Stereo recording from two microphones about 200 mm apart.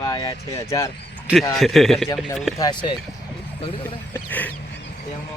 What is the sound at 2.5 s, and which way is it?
Speech, 20° left (ahead or behind).